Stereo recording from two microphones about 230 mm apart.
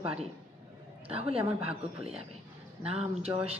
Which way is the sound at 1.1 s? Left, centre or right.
Right.